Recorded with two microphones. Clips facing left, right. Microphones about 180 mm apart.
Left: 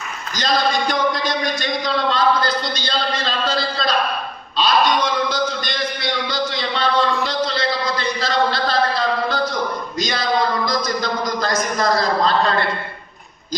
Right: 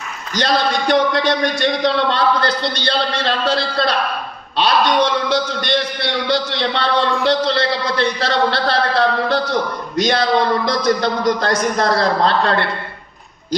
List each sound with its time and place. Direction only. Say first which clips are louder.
0.3 s a man's voice: right 2 dB; 65° right (ahead or behind)